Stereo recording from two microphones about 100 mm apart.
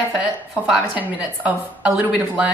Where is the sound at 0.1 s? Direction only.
15° right (ahead or behind).